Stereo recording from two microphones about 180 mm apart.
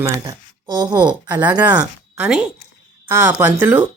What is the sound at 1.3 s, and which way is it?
Speech, 10° right (ahead or behind).